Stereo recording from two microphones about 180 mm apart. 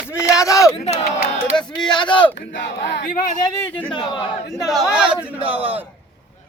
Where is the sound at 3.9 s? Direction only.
25° left (ahead or behind).